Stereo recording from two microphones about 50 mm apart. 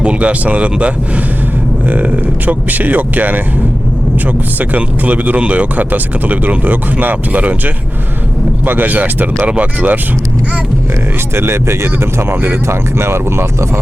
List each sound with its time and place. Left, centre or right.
0.0 s speech: right
2.5 s speech: right
4.7 s speech: right
11.3 s speech: right